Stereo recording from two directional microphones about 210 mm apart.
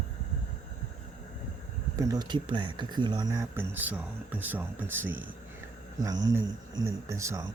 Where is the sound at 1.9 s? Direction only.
20° right (ahead or behind).